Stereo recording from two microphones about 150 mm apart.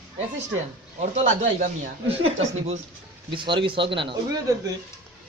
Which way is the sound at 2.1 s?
45° right (ahead or behind).